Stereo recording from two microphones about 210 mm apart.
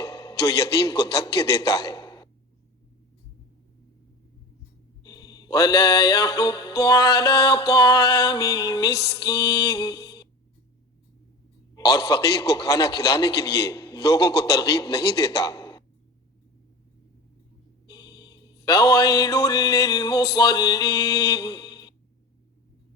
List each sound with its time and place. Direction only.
0.3 s a man's voice: 15° left (ahead or behind)
5.0 s mantra: 20° left (ahead or behind)
6.7 s a man's voice: 15° left (ahead or behind)
8.9 s mantra: 50° left (ahead or behind)
9.2 s a man's voice: 15° left (ahead or behind)
11.7 s a man's voice: 15° left (ahead or behind)
17.8 s a sound: 20° left (ahead or behind)
18.9 s a man's voice: 15° left (ahead or behind)